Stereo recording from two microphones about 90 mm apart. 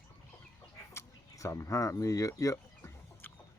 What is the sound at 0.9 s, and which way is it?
Speech, 35° left (ahead or behind).